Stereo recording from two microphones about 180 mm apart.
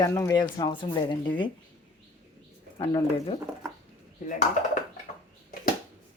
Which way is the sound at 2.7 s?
30° left (ahead or behind).